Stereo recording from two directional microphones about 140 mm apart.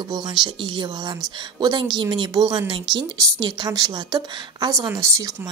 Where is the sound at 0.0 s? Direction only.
30° right (ahead or behind).